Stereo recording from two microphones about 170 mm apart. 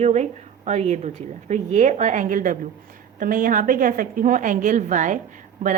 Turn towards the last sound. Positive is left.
turn(degrees=-50)  # may be behind; listen again after turning